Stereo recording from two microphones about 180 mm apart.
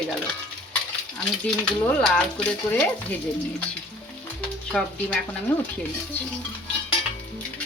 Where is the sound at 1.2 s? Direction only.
5° left (ahead or behind).